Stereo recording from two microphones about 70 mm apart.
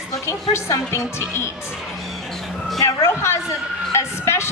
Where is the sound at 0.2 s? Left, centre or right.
Left.